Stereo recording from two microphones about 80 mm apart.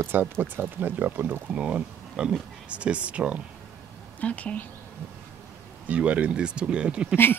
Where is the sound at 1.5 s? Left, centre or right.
Centre.